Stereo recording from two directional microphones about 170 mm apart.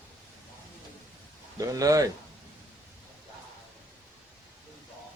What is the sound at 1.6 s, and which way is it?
Speech, 20° right (ahead or behind).